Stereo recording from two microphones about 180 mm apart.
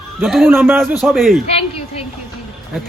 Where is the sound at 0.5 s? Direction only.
10° right (ahead or behind).